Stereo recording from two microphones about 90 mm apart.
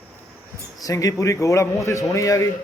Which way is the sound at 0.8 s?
40° left (ahead or behind).